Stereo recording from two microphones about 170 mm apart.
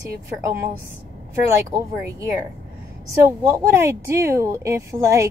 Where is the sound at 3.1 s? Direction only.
15° right (ahead or behind).